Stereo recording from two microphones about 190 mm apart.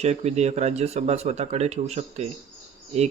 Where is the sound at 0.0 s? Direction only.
35° right (ahead or behind).